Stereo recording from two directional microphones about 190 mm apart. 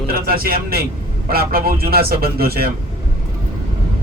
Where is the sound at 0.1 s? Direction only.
50° right (ahead or behind).